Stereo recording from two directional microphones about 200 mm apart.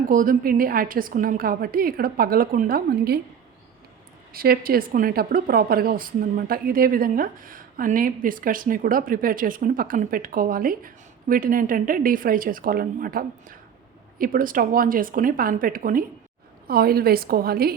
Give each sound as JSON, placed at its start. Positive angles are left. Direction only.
{"t": 0.1, "sound": "speech", "side_deg": -45}
{"t": 4.3, "sound": "speech", "side_deg": -50}